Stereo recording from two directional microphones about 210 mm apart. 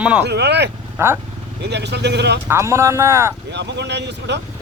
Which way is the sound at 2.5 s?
15° right (ahead or behind).